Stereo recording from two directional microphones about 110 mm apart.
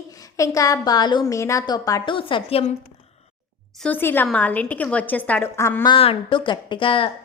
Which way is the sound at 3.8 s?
15° left (ahead or behind).